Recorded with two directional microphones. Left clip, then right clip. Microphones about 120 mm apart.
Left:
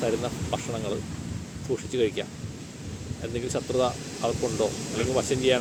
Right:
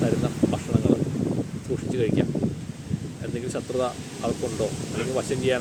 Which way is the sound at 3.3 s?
25° left (ahead or behind).